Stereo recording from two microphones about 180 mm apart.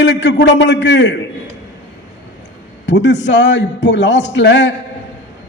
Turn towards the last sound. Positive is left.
turn(degrees=80)